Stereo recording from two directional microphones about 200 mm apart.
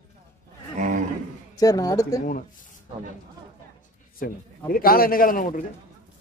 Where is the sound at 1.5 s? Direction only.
15° left (ahead or behind).